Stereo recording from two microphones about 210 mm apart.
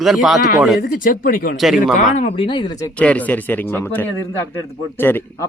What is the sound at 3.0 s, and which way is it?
A man's voice, 5° left (ahead or behind).